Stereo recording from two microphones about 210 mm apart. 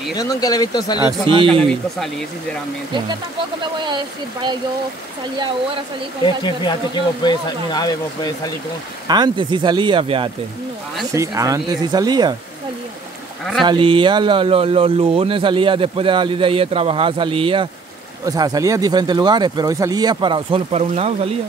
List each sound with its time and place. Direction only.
0.1 s speech: 15° left (ahead or behind)
1.5 s speech: 5° left (ahead or behind)
3.8 s speech: 20° right (ahead or behind)
6.2 s speech: 20° left (ahead or behind)
9.0 s speech: 20° right (ahead or behind)
13.7 s speech: 25° right (ahead or behind)